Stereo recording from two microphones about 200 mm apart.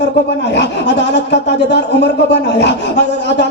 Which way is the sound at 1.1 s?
60° left (ahead or behind).